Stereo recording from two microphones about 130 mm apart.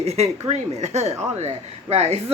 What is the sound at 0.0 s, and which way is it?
Speech, 55° right (ahead or behind).